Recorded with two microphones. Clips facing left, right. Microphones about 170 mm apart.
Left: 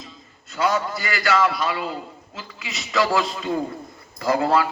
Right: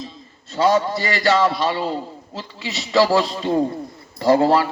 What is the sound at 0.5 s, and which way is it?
A man's voice, 30° right (ahead or behind).